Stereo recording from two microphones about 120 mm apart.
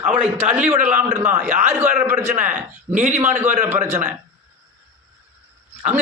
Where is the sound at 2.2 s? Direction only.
75° right (ahead or behind).